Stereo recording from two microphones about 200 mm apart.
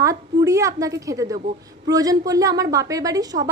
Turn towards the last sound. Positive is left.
turn(degrees=-20)  # may be behind; listen again after turning